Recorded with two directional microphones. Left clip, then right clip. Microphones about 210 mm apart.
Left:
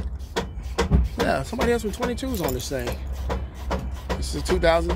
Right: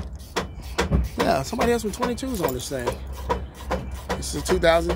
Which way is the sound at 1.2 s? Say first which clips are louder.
Right 1 dB; 15° right (ahead or behind).